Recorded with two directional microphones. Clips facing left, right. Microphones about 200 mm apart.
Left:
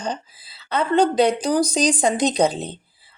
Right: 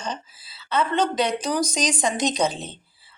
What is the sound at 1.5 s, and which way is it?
Speech, 35° left (ahead or behind).